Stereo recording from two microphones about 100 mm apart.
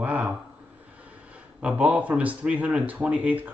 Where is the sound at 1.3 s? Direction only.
10° right (ahead or behind).